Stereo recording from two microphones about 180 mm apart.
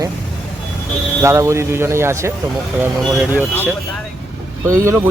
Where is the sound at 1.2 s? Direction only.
15° right (ahead or behind).